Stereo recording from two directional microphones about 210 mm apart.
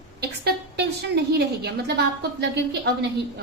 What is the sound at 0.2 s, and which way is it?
A woman's voice, 50° right (ahead or behind).